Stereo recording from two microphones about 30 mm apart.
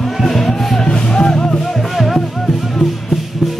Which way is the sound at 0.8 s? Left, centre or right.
Left.